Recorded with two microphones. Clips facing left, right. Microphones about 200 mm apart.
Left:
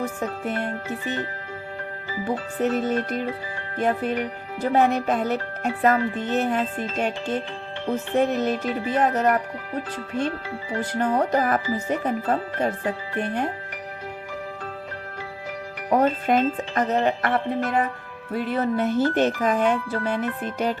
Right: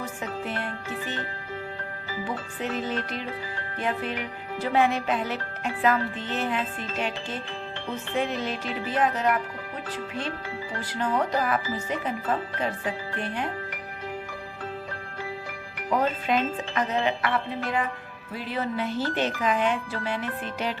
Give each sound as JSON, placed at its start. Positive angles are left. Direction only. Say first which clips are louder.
{"t": 0.0, "sound": "speech", "louder": "left 5 dB", "side_deg": 45}
{"t": 2.2, "sound": "speech", "louder": "left 8 dB", "side_deg": 45}
{"t": 10.9, "sound": "speech", "louder": "left 4 dB", "side_deg": 40}
{"t": 15.9, "sound": "speech", "louder": "left 5 dB", "side_deg": 50}